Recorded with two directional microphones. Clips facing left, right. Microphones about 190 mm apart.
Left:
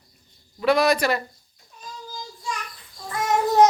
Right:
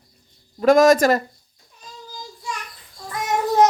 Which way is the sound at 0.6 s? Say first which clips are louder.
Right 6 dB; 45° right (ahead or behind).